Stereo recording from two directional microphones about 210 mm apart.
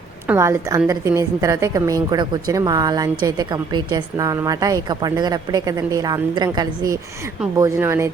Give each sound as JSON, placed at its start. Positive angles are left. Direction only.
{"t": 0.3, "sound": "a woman's voice", "side_deg": -10}